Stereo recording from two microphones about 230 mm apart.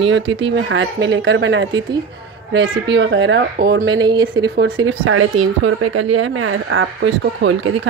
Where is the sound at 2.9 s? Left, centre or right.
Right.